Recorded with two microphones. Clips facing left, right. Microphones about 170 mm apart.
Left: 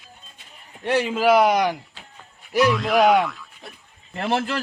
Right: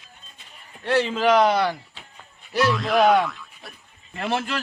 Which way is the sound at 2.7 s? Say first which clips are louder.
Right 2 dB; centre (ahead or behind).